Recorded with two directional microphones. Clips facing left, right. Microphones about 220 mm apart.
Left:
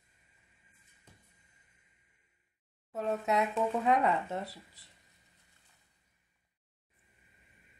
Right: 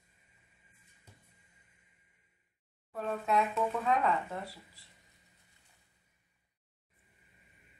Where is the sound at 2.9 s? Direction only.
20° left (ahead or behind).